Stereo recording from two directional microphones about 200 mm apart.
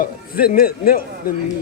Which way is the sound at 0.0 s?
45° left (ahead or behind).